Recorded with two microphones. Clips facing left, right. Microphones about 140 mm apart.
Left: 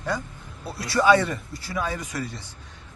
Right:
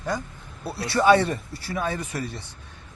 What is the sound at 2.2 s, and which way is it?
Speech, 60° right (ahead or behind).